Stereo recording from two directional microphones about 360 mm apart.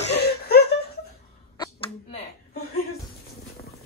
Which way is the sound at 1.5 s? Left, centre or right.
Centre.